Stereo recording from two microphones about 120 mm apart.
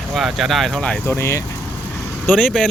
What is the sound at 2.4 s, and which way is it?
Speech, 5° left (ahead or behind).